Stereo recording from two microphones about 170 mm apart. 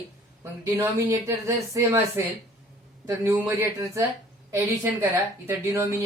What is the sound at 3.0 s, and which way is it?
A woman's voice, 15° right (ahead or behind).